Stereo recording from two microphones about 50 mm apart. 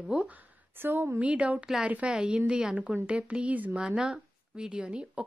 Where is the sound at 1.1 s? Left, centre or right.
Right.